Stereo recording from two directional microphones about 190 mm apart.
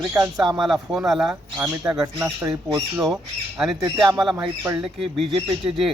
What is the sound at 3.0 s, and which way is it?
Speech, centre (ahead or behind).